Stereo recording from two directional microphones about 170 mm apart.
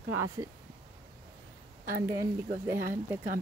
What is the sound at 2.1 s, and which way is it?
Speech, 20° right (ahead or behind).